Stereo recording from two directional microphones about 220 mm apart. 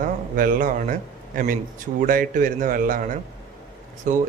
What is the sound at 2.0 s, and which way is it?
Speech, 40° right (ahead or behind).